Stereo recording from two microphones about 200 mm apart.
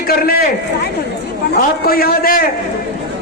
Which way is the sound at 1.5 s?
50° left (ahead or behind).